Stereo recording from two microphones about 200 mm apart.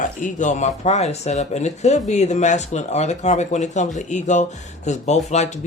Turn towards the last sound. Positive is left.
turn(degrees=35)  # may be behind; listen again after turning